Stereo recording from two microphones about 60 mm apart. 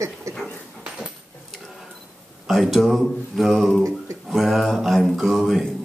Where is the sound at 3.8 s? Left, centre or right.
Right.